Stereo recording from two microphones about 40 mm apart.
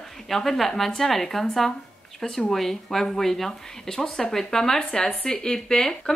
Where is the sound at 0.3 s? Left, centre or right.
Centre.